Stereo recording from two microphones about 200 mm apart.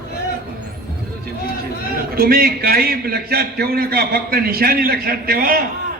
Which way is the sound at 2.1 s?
50° right (ahead or behind).